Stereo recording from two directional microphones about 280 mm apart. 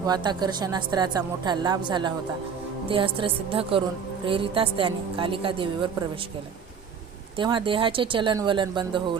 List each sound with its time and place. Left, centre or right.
0.0 s a woman's voice: centre
7.3 s a woman's voice: centre